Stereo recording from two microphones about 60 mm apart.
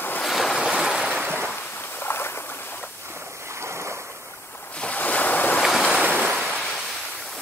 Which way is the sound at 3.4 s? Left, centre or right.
Right.